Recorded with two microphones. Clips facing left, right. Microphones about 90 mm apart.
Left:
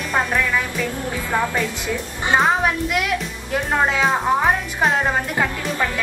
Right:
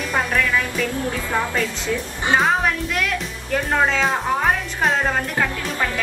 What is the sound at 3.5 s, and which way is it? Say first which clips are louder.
Music: even; 10° left (ahead or behind).